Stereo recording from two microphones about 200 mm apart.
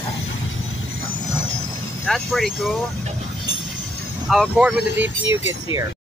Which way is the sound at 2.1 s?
Centre (ahead or behind).